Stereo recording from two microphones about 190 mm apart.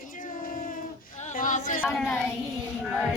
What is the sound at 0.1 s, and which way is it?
Child singing, 45° left (ahead or behind).